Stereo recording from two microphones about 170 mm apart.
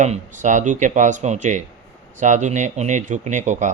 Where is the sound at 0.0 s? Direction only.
45° right (ahead or behind).